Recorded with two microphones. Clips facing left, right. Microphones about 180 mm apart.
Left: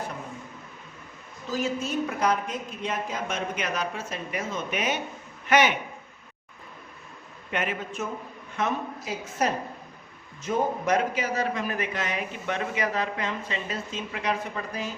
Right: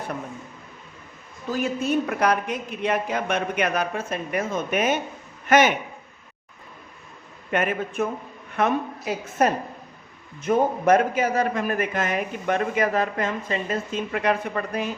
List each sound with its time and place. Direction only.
1.5 s a man's voice: 60° right (ahead or behind)
7.5 s a man's voice: 50° right (ahead or behind)